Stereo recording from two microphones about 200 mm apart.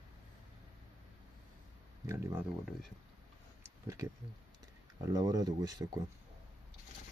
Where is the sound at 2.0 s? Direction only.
10° right (ahead or behind).